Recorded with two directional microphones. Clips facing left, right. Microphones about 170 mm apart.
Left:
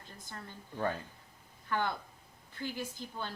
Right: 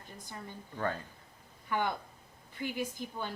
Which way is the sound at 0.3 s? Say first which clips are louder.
Right 2 dB; 15° right (ahead or behind).